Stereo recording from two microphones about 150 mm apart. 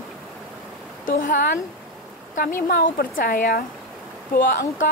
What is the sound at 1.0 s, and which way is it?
Speech, 65° left (ahead or behind).